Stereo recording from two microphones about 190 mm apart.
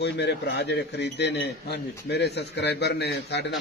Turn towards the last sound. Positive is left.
turn(degrees=60)  # may be behind; listen again after turning